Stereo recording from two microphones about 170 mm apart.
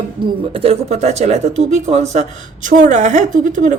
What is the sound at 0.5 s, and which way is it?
A woman's voice, 35° right (ahead or behind).